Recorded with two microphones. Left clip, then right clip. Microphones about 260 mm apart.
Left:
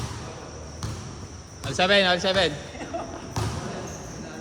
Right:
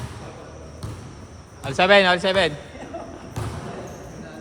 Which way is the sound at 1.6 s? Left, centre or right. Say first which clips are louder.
Right 5 dB; right.